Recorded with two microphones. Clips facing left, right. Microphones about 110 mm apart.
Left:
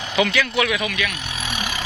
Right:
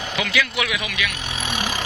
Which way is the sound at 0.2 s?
Centre (ahead or behind).